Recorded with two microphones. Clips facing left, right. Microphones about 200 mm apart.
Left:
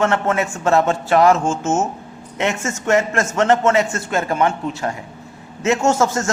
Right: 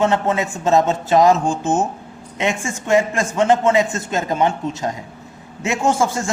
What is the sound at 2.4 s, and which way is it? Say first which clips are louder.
A man's voice: left 1 dB; 15° right (ahead or behind).